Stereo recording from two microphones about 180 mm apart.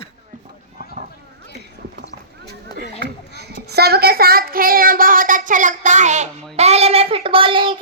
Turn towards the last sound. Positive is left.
turn(degrees=-30)  # may be behind; listen again after turning